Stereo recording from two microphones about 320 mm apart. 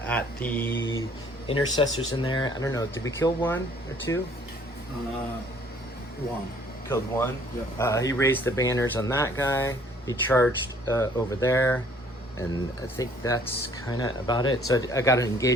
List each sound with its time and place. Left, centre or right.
0.1 s mantra: centre
1.7 s speech: centre
6.8 s speech: centre
13.0 s speech: centre